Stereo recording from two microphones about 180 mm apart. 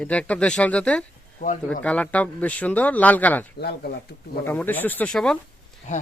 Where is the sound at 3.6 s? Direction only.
60° left (ahead or behind).